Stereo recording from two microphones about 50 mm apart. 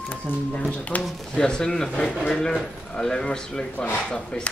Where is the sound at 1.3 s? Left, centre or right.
Centre.